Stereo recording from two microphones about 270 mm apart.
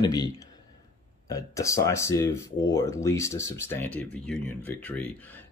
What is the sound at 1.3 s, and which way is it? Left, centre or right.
Speech, centre.